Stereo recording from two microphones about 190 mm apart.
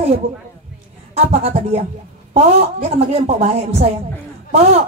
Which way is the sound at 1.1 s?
30° right (ahead or behind).